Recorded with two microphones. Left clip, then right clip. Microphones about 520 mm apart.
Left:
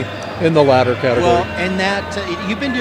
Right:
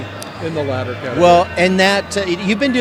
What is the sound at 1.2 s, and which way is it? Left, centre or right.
Speech, right.